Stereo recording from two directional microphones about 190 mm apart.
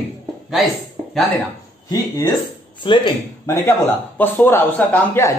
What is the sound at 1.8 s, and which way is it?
Speech, 20° left (ahead or behind).